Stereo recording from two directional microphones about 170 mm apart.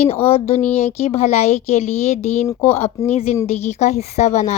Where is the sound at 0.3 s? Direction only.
35° left (ahead or behind).